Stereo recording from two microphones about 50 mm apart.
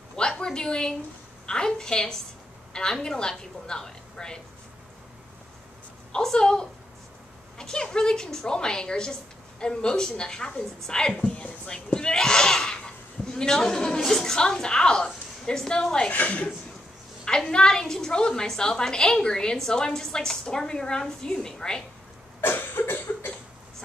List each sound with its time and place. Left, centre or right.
0.1 s a sound: centre
1.4 s a woman's voice: centre
6.1 s a woman's voice: centre
16.1 s speech: left
17.2 s a woman's voice: centre
22.4 s cough: left